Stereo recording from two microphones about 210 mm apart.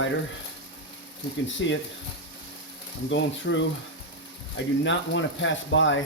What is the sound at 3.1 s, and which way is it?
Speech, 60° left (ahead or behind).